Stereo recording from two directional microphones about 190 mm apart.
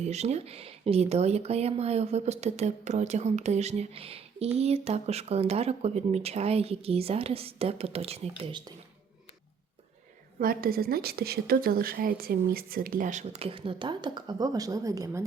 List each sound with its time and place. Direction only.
0.0 s speech: 35° right (ahead or behind)
10.4 s a woman's voice: 50° right (ahead or behind); by 15.2 s 15° right (ahead or behind)